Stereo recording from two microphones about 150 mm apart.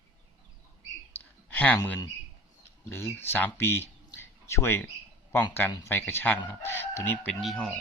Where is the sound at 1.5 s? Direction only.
10° left (ahead or behind).